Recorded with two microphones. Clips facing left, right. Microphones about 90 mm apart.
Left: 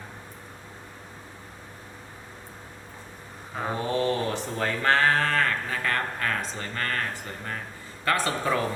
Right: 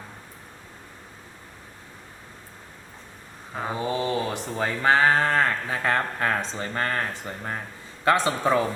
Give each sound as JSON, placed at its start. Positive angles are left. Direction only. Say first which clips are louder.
{"t": 3.5, "sound": "a man's voice", "louder": "even", "side_deg": -5}